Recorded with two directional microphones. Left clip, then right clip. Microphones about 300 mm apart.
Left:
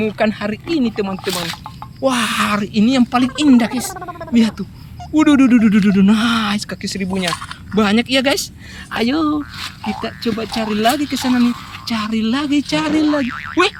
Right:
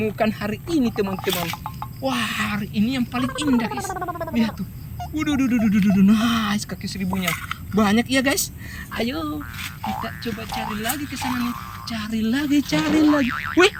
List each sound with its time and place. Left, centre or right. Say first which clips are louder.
0.0 s speech: left 5 dB; centre
3.8 s speech: right 1 dB; centre
4.4 s speech: left 7 dB; centre